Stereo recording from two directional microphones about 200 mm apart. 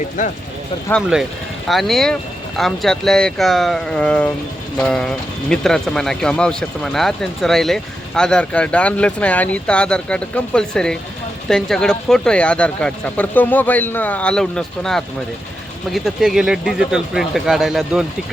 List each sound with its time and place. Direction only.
0.2 s speech: 40° left (ahead or behind)
1.6 s speech: centre (ahead or behind)